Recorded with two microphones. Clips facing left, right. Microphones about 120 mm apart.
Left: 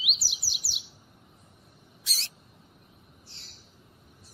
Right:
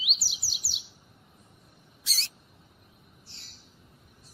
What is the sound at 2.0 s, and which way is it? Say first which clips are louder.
Rodents: right 1 dB; 15° left (ahead or behind).